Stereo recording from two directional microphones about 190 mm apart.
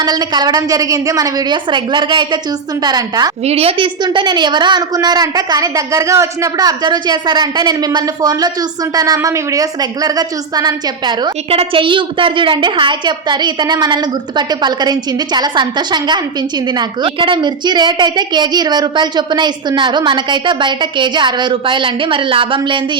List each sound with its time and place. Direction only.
0.0 s a woman's voice: 20° right (ahead or behind)
3.4 s a woman's voice: 30° right (ahead or behind)